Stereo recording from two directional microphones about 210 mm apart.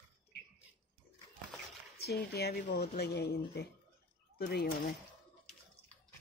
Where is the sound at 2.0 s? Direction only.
50° left (ahead or behind).